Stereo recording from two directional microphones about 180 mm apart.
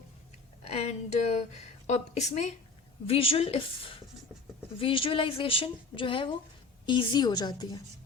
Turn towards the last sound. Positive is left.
turn(degrees=25)  # may be behind; listen again after turning